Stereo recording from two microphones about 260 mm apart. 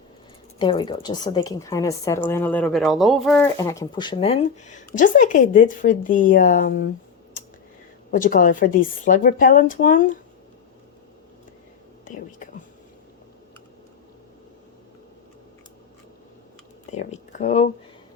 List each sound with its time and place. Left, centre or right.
0.6 s a woman's voice: centre
8.1 s speech: left
12.0 s speech: left
16.9 s speech: left